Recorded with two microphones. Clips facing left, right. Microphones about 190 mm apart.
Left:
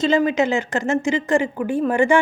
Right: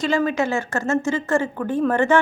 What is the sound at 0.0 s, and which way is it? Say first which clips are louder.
Speech: left 3 dB; 20° left (ahead or behind).